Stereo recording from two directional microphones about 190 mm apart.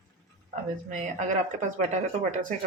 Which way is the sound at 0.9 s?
40° right (ahead or behind).